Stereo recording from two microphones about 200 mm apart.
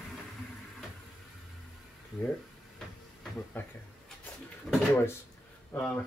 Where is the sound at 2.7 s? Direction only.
5° left (ahead or behind).